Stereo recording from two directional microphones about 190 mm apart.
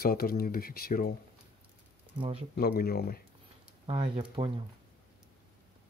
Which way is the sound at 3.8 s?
30° right (ahead or behind).